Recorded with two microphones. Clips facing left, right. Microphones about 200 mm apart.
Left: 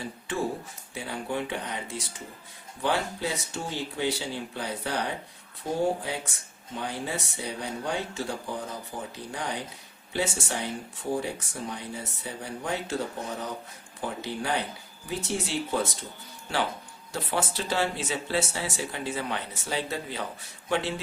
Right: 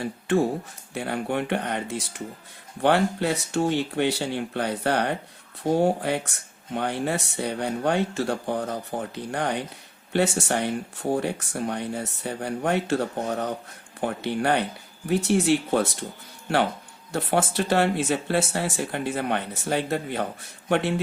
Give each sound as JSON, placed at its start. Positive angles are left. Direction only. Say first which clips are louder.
{"t": 0.0, "sound": "speech", "louder": "right 8 dB", "side_deg": -60}
{"t": 17.1, "sound": "speech", "louder": "right 6 dB", "side_deg": -60}